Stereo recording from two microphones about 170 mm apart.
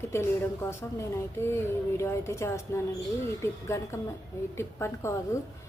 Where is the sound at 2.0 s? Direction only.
15° left (ahead or behind).